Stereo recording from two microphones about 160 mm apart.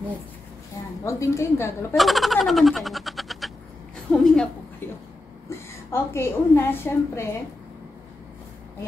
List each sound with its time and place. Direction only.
1.0 s a woman's voice: 20° left (ahead or behind)
2.0 s a child's voice: centre (ahead or behind)
4.1 s a sound: centre (ahead or behind)
5.9 s a woman's voice: 15° left (ahead or behind)